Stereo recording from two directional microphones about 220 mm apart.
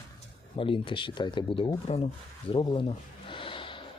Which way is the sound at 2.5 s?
20° left (ahead or behind).